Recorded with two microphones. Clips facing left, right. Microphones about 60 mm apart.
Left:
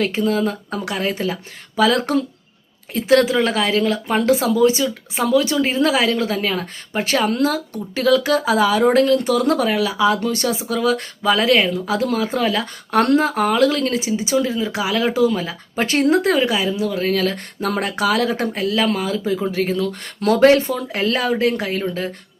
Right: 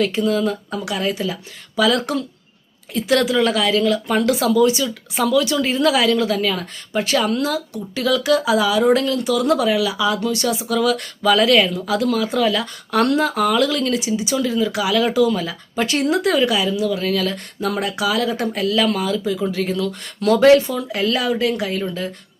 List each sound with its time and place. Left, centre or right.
0.0 s speech: left